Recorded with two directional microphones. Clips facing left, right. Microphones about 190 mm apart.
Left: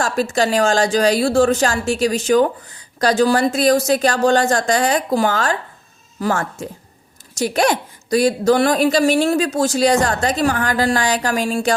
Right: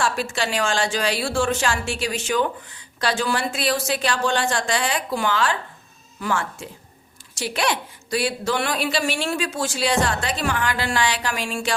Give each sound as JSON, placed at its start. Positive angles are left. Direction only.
{"t": 0.0, "sound": "a woman's voice", "side_deg": 40}